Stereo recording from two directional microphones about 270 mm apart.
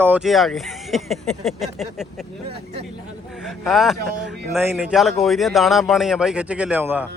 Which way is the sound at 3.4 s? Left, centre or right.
Centre.